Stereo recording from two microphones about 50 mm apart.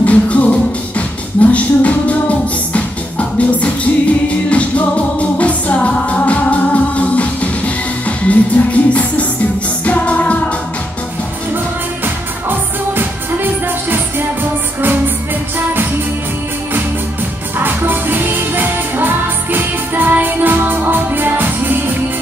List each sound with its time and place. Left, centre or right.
0.0 s music: left
12.4 s music: right
17.6 s music: right